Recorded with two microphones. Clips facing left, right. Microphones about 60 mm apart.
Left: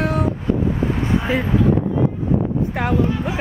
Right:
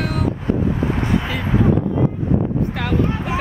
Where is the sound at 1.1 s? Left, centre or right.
Left.